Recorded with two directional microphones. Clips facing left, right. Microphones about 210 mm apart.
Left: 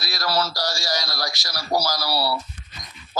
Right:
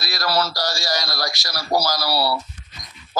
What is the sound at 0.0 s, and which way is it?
A man's voice, 75° right (ahead or behind).